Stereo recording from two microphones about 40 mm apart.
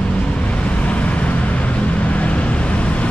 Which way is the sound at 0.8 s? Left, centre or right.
Left.